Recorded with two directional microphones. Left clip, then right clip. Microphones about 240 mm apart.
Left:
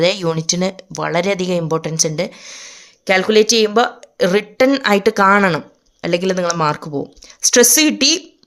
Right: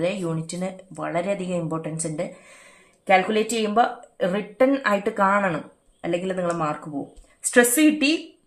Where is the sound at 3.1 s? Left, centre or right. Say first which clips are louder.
Left 7 dB; left.